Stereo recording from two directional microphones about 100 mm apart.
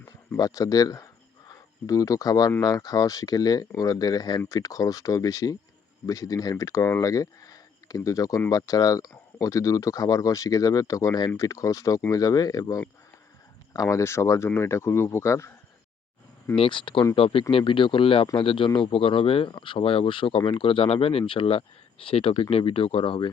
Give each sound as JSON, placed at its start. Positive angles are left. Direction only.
{"t": 0.3, "sound": "speech", "side_deg": 35}
{"t": 16.6, "sound": "speech", "side_deg": 60}